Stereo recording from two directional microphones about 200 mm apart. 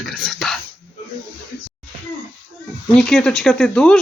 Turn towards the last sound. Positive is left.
turn(degrees=5)  # may be behind; listen again after turning